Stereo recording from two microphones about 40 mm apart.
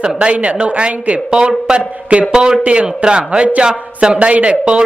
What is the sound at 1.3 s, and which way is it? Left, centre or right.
A man's voice, right.